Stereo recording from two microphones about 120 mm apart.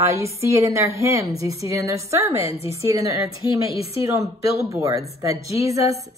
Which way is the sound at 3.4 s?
35° left (ahead or behind).